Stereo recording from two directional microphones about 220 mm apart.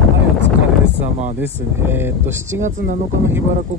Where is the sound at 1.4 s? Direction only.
10° right (ahead or behind).